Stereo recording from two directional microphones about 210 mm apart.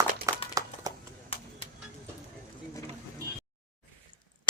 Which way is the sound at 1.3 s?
30° left (ahead or behind).